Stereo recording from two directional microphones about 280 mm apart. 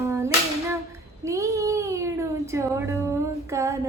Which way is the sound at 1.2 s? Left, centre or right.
Centre.